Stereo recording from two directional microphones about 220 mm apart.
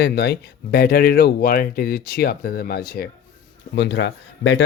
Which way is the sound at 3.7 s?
55° left (ahead or behind).